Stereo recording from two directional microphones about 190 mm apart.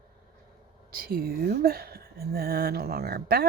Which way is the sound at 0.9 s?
50° right (ahead or behind).